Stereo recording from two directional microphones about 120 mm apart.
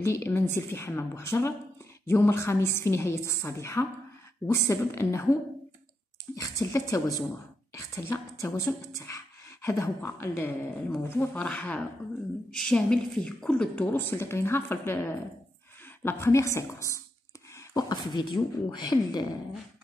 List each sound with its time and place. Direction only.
0.0 s a woman's voice: 20° left (ahead or behind)
11.4 s a woman's voice: 10° left (ahead or behind); by 19.2 s 40° left (ahead or behind)